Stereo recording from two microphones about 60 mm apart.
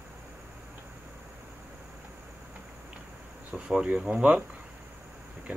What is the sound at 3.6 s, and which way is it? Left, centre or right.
Speech, centre.